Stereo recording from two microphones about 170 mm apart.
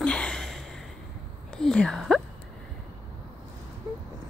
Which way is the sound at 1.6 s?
5° left (ahead or behind).